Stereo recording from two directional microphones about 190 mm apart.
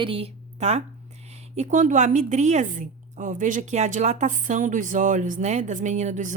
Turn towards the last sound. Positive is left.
turn(degrees=-40)  # may be behind; listen again after turning